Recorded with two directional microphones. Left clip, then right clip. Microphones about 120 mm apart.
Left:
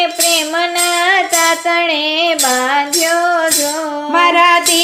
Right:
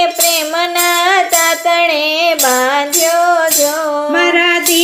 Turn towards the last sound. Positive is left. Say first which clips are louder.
# left 2 dB
turn(degrees=35)  # may be behind; listen again after turning